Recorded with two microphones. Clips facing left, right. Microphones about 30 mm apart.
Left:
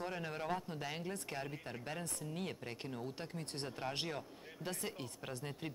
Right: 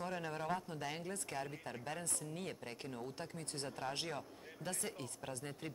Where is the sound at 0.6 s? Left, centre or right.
Centre.